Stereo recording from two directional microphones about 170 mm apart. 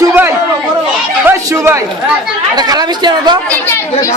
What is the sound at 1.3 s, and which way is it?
Chatter, 15° right (ahead or behind).